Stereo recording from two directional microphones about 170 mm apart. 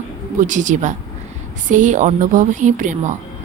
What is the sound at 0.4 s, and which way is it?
A woman's voice, 45° right (ahead or behind).